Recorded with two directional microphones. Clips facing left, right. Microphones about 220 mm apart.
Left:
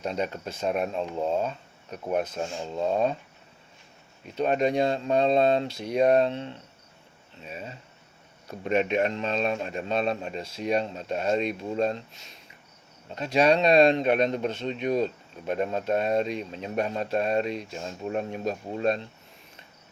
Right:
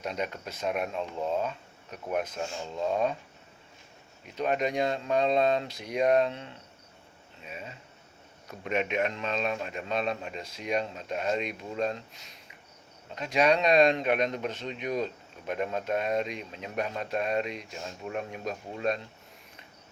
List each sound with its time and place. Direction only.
0.0 s speech: 30° left (ahead or behind)
4.4 s speech: 30° left (ahead or behind)